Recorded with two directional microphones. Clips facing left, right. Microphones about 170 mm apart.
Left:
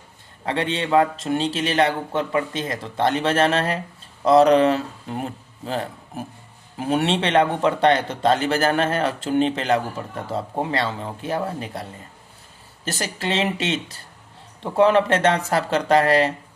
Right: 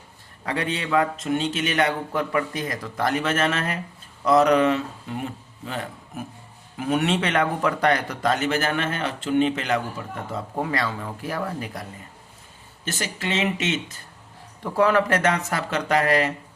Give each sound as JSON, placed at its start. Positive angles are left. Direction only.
{"t": 0.4, "sound": "a man's voice", "side_deg": 30}
{"t": 14.6, "sound": "speech", "side_deg": 25}